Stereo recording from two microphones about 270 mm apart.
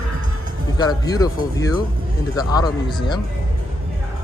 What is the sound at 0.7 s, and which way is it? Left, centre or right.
Speech, centre.